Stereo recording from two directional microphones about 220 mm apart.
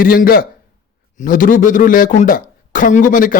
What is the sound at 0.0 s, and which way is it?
A man's voice, 40° left (ahead or behind).